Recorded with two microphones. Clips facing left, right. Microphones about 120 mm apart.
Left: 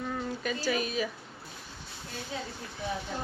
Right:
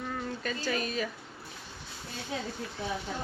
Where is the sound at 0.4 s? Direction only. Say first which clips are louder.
Left 2 dB; 10° left (ahead or behind).